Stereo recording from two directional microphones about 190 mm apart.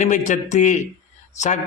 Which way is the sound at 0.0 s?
40° left (ahead or behind).